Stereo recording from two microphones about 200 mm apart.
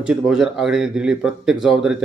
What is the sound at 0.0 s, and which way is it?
Speech, 5° right (ahead or behind).